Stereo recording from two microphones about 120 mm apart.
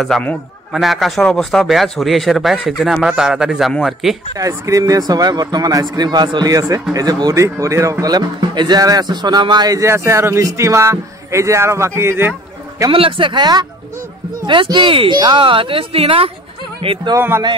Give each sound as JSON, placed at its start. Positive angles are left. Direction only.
{"t": 0.1, "sound": "speech", "side_deg": 5}
{"t": 4.4, "sound": "speech", "side_deg": -30}
{"t": 12.9, "sound": "speech", "side_deg": -45}